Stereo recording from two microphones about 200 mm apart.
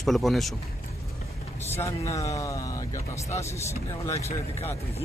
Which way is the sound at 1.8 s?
15° left (ahead or behind).